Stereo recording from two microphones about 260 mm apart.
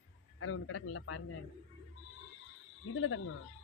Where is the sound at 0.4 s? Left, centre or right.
Left.